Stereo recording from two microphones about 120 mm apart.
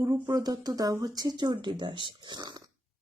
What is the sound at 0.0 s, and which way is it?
Speech, 30° right (ahead or behind).